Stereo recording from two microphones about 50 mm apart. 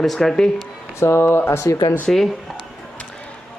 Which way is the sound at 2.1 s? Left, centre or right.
Centre.